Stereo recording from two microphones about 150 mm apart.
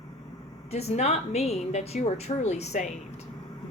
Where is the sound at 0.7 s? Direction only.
45° left (ahead or behind).